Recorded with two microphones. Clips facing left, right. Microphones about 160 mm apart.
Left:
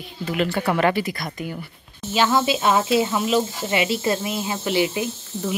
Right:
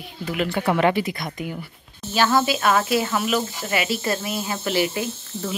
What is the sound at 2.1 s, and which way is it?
Speech, 15° left (ahead or behind).